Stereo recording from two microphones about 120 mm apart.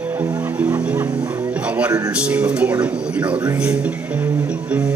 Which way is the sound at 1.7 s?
10° right (ahead or behind).